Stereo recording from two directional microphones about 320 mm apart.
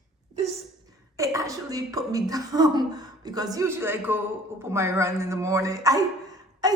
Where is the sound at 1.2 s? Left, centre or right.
Centre.